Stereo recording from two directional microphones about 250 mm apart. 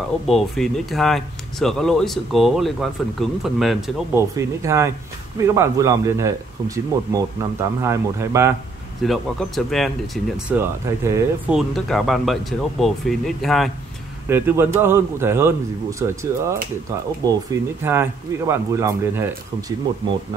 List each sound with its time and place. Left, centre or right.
0.3 s speech: centre
4.4 s speech: centre
9.0 s speech: centre
14.3 s speech: centre